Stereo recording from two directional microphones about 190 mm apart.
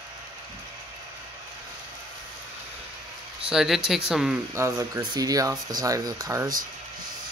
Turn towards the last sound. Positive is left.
turn(degrees=-15)  # may be behind; listen again after turning